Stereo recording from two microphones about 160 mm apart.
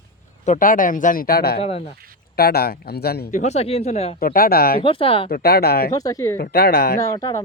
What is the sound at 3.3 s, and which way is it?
Speech, 45° left (ahead or behind).